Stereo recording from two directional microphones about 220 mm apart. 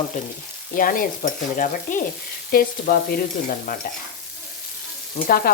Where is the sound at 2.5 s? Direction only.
40° left (ahead or behind).